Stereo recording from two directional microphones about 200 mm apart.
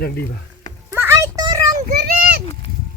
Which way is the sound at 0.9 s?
15° right (ahead or behind).